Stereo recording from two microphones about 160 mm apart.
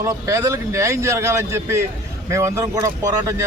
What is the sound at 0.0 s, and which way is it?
Speech, 20° right (ahead or behind).